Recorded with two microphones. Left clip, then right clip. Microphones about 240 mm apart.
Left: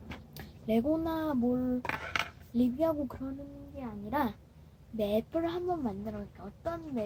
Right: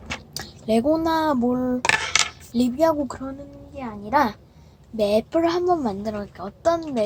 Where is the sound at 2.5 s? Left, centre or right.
Centre.